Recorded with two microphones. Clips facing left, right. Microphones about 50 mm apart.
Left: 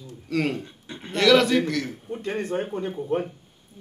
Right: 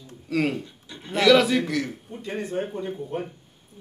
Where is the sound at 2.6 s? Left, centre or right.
Left.